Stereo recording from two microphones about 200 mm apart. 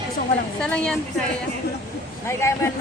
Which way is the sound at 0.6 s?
5° left (ahead or behind).